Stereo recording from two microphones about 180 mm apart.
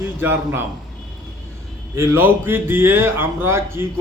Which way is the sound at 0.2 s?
10° right (ahead or behind).